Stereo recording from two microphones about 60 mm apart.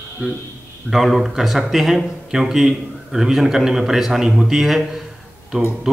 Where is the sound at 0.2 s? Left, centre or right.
Right.